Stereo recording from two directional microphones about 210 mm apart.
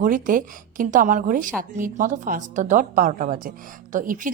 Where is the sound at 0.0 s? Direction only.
40° right (ahead or behind).